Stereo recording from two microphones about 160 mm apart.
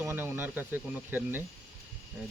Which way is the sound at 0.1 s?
15° right (ahead or behind).